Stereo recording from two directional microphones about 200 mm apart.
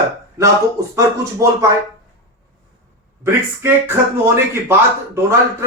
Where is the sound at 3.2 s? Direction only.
10° right (ahead or behind).